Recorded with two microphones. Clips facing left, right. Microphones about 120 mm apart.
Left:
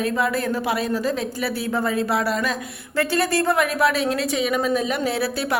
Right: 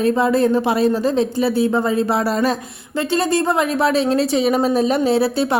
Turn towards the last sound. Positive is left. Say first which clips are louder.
# right 7 dB
turn(degrees=-25)  # may be behind; listen again after turning